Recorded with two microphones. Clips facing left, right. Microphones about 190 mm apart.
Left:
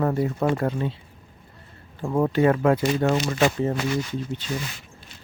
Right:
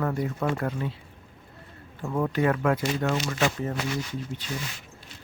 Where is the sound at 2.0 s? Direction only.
30° left (ahead or behind).